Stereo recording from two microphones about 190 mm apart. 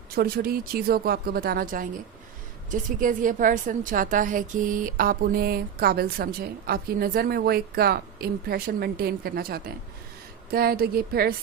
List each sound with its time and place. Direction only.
0.2 s a woman's voice: 50° right (ahead or behind)